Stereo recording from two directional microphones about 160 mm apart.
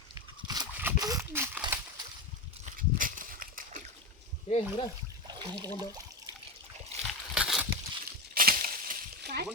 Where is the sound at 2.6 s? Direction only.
60° right (ahead or behind).